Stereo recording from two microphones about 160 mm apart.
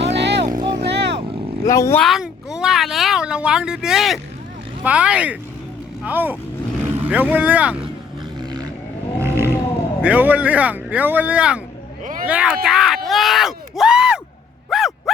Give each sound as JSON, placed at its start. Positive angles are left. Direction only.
{"t": 0.0, "sound": "vehicle", "side_deg": -90}
{"t": 0.5, "sound": "vehicle", "side_deg": -25}
{"t": 0.8, "sound": "vehicle", "side_deg": -90}
{"t": 1.6, "sound": "speech", "side_deg": 20}
{"t": 2.0, "sound": "a child's voice", "side_deg": 0}
{"t": 9.2, "sound": "vehicle", "side_deg": -15}
{"t": 10.0, "sound": "speech", "side_deg": -10}
{"t": 13.1, "sound": "a sound", "side_deg": 0}